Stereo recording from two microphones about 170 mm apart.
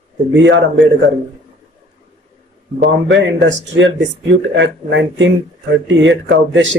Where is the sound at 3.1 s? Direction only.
90° right.